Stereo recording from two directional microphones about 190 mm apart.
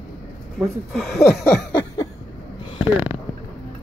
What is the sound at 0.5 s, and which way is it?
Speech, centre (ahead or behind).